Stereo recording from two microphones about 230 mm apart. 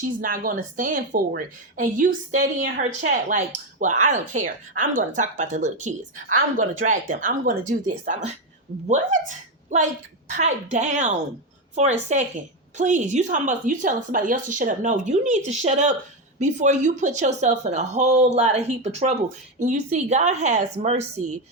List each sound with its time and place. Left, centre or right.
0.2 s a woman's voice: right